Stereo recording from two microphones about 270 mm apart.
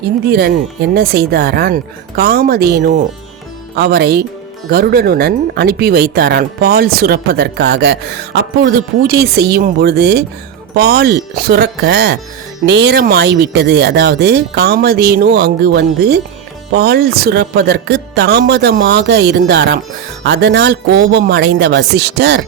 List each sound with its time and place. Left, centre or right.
0.3 s speech: right